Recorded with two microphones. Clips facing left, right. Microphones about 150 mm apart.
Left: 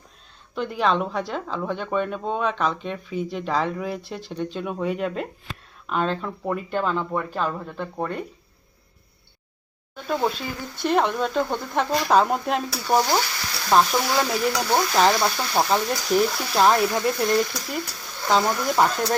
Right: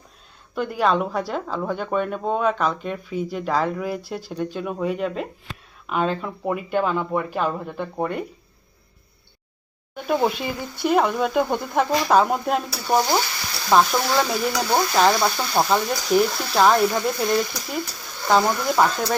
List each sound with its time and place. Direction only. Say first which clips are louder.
0.5 s speech: right 2 dB; 5° right (ahead or behind)
9.9 s speech: right 3 dB; 10° right (ahead or behind)